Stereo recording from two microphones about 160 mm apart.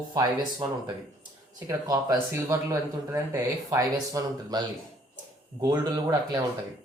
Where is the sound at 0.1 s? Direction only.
25° right (ahead or behind).